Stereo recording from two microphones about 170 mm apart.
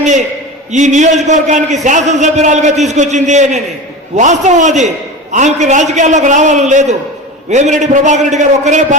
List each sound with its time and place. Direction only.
0.7 s a man's voice: 45° right (ahead or behind)